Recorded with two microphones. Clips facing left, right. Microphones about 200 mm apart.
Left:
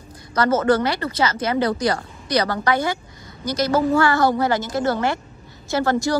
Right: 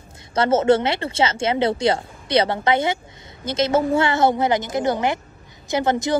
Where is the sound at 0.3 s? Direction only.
25° right (ahead or behind).